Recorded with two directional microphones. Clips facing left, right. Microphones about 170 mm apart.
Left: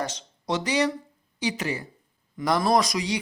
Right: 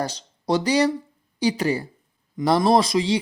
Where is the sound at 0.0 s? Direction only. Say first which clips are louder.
Right 4 dB; 35° right (ahead or behind).